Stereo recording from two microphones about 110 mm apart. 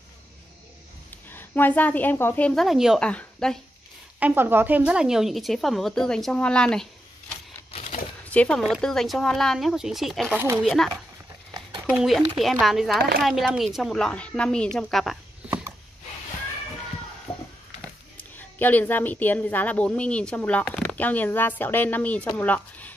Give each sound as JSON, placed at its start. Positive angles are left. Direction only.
{"t": 1.3, "sound": "a woman's voice", "side_deg": 20}
{"t": 2.5, "sound": "a woman's voice", "side_deg": 0}
{"t": 3.0, "sound": "speech", "side_deg": 10}
{"t": 4.2, "sound": "a woman's voice", "side_deg": -20}
{"t": 7.7, "sound": "a sound", "side_deg": 80}
{"t": 8.3, "sound": "a woman's voice", "side_deg": 10}
{"t": 15.4, "sound": "a sound", "side_deg": -20}
{"t": 17.3, "sound": "a sound", "side_deg": 60}
{"t": 18.3, "sound": "a woman's voice", "side_deg": 15}